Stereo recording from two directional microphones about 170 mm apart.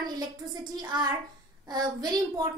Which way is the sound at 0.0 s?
25° right (ahead or behind).